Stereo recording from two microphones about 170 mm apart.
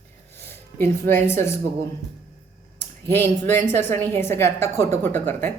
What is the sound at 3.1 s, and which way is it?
Speech, 15° left (ahead or behind).